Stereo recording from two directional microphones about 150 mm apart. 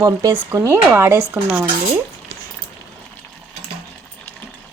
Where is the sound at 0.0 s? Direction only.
20° right (ahead or behind).